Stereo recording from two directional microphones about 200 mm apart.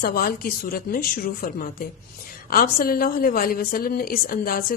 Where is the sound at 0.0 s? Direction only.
45° left (ahead or behind).